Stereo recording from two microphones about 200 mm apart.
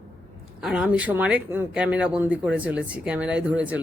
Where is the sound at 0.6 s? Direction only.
5° right (ahead or behind).